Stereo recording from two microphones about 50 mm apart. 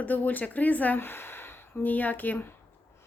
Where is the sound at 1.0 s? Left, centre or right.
Left.